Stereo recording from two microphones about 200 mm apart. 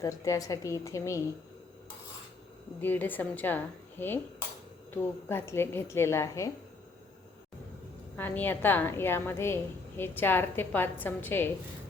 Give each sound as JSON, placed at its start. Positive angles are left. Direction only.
{"t": 0.0, "sound": "a woman's voice", "side_deg": 15}
{"t": 2.8, "sound": "a woman's voice", "side_deg": 10}
{"t": 8.1, "sound": "a woman's voice", "side_deg": 10}